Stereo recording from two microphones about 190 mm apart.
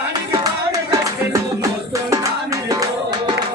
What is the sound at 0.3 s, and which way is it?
Music, 20° right (ahead or behind).